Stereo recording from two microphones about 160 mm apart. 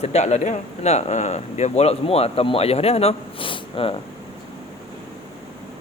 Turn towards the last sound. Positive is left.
turn(degrees=35)  # may be behind; listen again after turning